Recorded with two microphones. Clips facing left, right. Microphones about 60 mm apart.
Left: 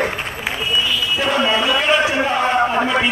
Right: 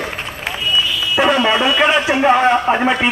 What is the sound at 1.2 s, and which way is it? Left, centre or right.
A man's voice, right.